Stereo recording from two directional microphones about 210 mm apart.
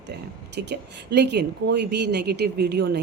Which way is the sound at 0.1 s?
55° right (ahead or behind).